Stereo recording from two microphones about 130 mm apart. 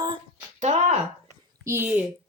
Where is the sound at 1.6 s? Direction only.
20° right (ahead or behind).